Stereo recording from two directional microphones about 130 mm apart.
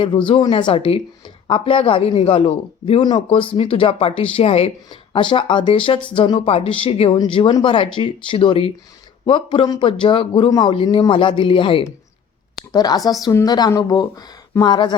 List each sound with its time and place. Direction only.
0.3 s speech: 40° left (ahead or behind)
3.0 s speech: 35° left (ahead or behind); by 4.7 s 50° left (ahead or behind)
4.9 s speech: 40° left (ahead or behind)
12.7 s speech: 30° left (ahead or behind)